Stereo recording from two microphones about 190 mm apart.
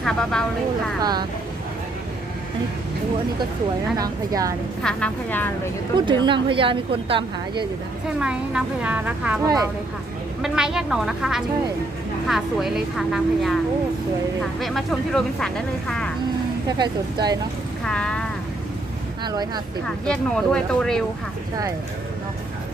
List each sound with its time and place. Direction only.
0.0 s speech: centre (ahead or behind)
3.9 s a woman's voice: 20° right (ahead or behind)
4.8 s speech: 5° left (ahead or behind)
6.1 s a woman's voice: 25° right (ahead or behind)
8.2 s a woman's voice: 5° right (ahead or behind)
9.4 s a woman's voice: 20° right (ahead or behind)
10.4 s speech: 5° right (ahead or behind)
14.6 s speech: centre (ahead or behind)
16.6 s a woman's voice: 20° right (ahead or behind)
17.8 s speech: 5° left (ahead or behind)
19.2 s a woman's voice: 20° right (ahead or behind)
20.1 s speech: 5° left (ahead or behind)